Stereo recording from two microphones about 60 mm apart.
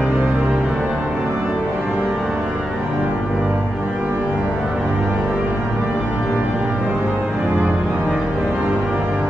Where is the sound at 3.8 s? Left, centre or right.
Right.